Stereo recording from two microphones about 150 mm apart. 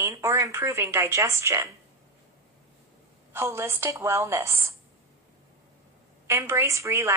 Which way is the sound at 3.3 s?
15° right (ahead or behind).